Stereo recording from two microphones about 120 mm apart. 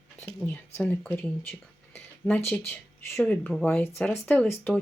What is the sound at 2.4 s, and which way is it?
Speech, 20° left (ahead or behind).